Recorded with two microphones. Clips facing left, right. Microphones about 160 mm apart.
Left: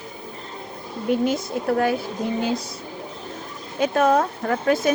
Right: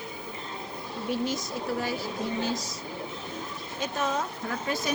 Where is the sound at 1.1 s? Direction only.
55° left (ahead or behind).